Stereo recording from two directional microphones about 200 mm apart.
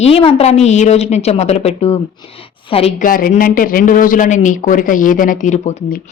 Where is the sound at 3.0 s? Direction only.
45° left (ahead or behind).